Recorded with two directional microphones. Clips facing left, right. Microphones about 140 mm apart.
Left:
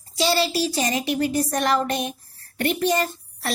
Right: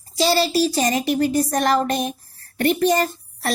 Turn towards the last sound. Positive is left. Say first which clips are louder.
# right 3 dB
turn(degrees=-40)  # may be behind; listen again after turning